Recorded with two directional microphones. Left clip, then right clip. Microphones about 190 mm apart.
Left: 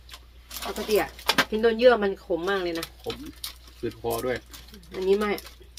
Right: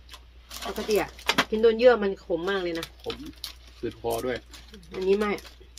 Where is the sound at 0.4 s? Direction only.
15° right (ahead or behind).